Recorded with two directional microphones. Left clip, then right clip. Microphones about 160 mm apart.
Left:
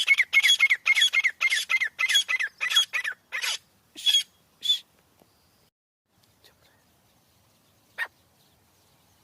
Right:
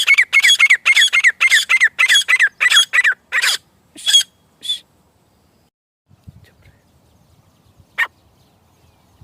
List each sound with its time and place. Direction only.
0.0 s squawk: 25° right (ahead or behind)
3.9 s bird: 10° left (ahead or behind)
4.6 s crow: 10° left (ahead or behind)